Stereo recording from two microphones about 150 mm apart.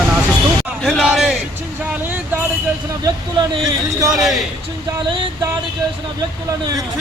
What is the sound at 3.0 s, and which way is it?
Speech, 30° right (ahead or behind).